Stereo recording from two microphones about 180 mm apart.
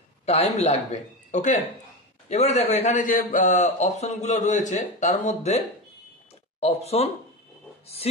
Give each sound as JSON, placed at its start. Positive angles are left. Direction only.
{"t": 0.2, "sound": "a man's voice", "side_deg": 35}
{"t": 6.6, "sound": "a man's voice", "side_deg": 35}